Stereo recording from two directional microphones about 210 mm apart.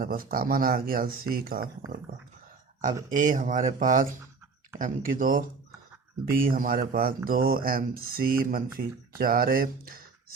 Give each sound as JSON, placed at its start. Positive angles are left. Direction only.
{"t": 0.0, "sound": "speech", "side_deg": -40}
{"t": 2.8, "sound": "speech", "side_deg": -40}